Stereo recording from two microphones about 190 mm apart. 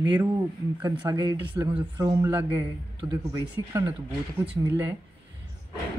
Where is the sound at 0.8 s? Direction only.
20° right (ahead or behind).